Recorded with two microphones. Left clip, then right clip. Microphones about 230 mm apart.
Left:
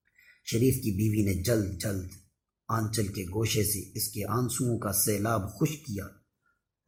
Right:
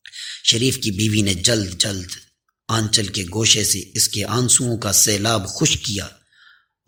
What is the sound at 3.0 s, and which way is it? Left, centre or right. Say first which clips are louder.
Speech: right 10 dB; right.